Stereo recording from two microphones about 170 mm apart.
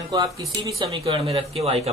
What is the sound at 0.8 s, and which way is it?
Speech, 30° right (ahead or behind).